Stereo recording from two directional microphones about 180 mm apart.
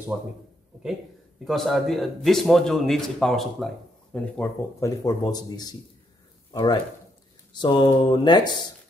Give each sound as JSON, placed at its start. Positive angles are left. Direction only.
{"t": 0.1, "sound": "a man's voice", "side_deg": -5}
{"t": 1.4, "sound": "a man's voice", "side_deg": 0}